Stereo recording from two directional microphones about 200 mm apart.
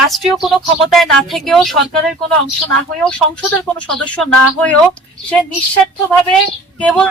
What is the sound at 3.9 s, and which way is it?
Speech, 5° left (ahead or behind).